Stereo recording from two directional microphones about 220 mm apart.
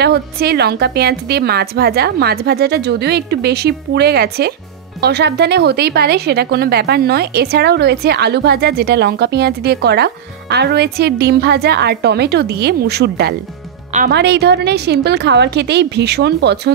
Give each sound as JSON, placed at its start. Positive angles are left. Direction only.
{"t": 0.0, "sound": "speech", "side_deg": -45}